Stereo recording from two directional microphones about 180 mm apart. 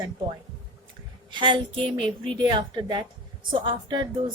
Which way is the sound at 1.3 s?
25° right (ahead or behind).